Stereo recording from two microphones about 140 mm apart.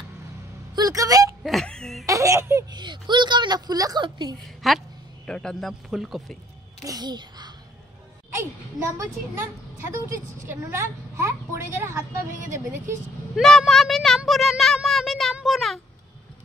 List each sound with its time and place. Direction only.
0.7 s speech: 25° right (ahead or behind)
1.4 s speech: centre (ahead or behind)
2.0 s a sound: 25° right (ahead or behind)
4.6 s a man's voice: 5° left (ahead or behind)
6.8 s a child's voice: 25° right (ahead or behind)
13.4 s a sound: centre (ahead or behind)